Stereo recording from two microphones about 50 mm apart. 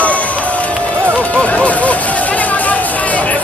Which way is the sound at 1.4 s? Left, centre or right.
Left.